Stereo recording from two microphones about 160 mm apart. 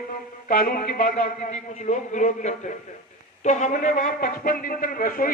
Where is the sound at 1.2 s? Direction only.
45° left (ahead or behind).